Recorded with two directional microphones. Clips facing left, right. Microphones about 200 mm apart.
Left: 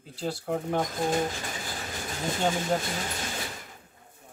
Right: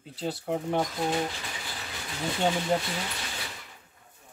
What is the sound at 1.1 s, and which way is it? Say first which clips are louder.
Bird: left 2 dB; 45° left (ahead or behind).